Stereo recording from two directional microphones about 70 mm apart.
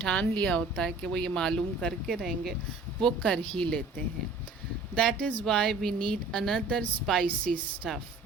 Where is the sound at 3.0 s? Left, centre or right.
Centre.